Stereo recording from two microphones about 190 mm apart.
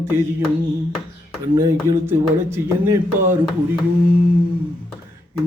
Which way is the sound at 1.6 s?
15° right (ahead or behind).